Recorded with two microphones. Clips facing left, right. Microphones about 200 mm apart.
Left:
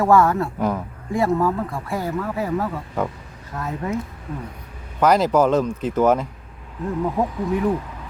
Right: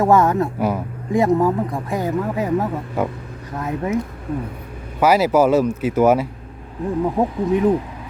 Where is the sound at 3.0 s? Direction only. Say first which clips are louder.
Right 2 dB; 5° right (ahead or behind).